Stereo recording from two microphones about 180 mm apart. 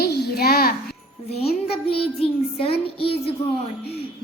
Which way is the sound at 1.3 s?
35° left (ahead or behind).